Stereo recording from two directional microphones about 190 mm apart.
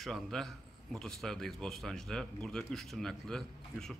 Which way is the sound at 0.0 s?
Centre (ahead or behind).